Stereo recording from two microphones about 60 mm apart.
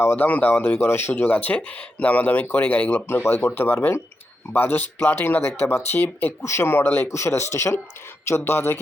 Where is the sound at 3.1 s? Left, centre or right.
Left.